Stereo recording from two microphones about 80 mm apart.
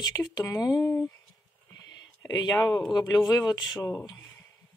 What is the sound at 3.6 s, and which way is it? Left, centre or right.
Speech, left.